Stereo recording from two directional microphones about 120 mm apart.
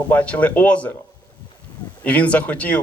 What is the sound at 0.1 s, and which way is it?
Speech, 15° left (ahead or behind).